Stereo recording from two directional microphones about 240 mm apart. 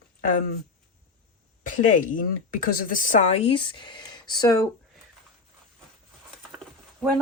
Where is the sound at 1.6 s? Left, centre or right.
Left; by 4.6 s centre.